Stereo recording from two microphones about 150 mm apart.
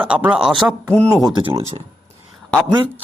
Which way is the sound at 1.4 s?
40° right (ahead or behind).